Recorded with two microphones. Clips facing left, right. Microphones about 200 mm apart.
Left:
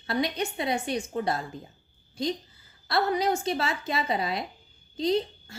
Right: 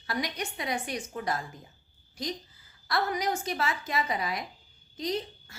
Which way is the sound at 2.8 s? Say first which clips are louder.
Left 4 dB; 30° left (ahead or behind).